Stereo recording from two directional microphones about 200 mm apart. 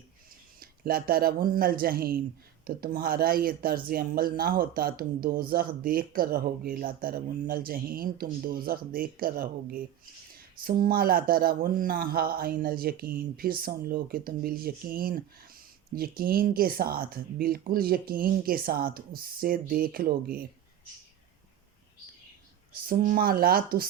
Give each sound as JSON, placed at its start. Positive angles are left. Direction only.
{"t": 0.6, "sound": "speech", "side_deg": -45}
{"t": 22.9, "sound": "speech", "side_deg": -45}